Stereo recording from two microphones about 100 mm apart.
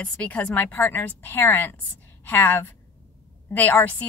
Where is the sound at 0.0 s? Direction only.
15° left (ahead or behind).